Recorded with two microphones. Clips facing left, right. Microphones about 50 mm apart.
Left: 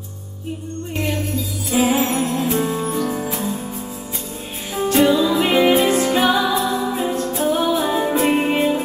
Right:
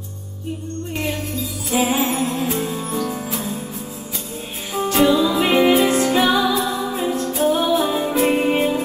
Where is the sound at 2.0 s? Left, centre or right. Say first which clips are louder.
Left 1 dB; left.